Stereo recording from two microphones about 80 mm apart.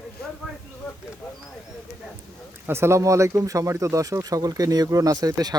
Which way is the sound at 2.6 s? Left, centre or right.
Right.